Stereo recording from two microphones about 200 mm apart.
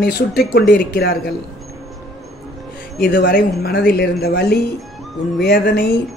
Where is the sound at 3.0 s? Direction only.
45° left (ahead or behind).